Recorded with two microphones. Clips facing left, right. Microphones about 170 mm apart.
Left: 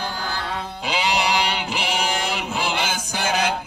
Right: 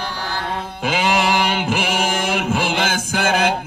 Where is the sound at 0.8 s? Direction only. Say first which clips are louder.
Right 4 dB; 50° right (ahead or behind).